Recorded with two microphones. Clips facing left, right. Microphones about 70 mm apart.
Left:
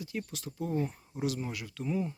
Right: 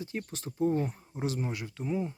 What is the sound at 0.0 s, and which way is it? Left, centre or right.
Speech, right.